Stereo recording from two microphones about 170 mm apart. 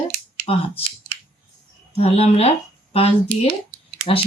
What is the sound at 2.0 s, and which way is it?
Speech, 35° left (ahead or behind).